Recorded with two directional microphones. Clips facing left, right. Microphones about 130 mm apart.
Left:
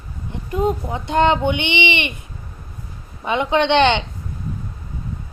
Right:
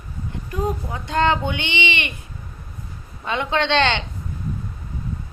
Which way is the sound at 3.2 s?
15° left (ahead or behind).